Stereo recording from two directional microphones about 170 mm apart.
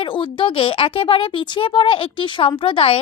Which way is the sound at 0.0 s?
30° left (ahead or behind).